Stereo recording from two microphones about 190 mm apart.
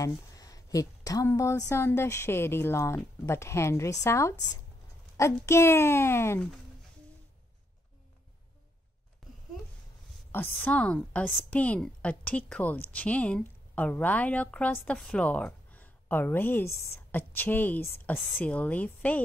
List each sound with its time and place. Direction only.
0.0 s a woman's voice: 20° left (ahead or behind)
9.2 s a sound: centre (ahead or behind)
10.3 s a woman's voice: 10° left (ahead or behind)